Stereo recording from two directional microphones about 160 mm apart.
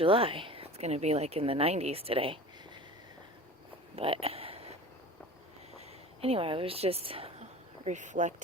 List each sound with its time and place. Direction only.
0.0 s speech: 35° right (ahead or behind)
3.9 s a sound: 35° right (ahead or behind)
6.2 s speech: 35° right (ahead or behind)
7.9 s speech: 50° right (ahead or behind)